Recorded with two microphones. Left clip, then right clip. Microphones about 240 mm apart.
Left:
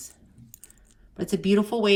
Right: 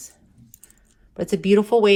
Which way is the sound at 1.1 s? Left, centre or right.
Centre.